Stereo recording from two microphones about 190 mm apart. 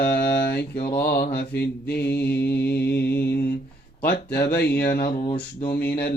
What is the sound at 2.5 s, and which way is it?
Mantra, 60° left (ahead or behind).